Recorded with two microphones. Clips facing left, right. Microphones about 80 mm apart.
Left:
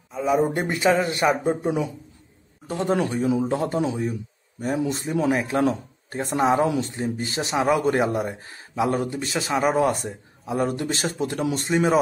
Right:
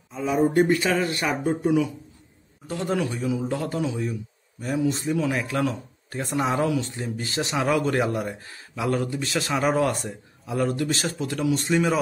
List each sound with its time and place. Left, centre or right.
0.1 s a sound: centre
0.6 s speech: left
3.4 s speech: left
9.4 s speech: centre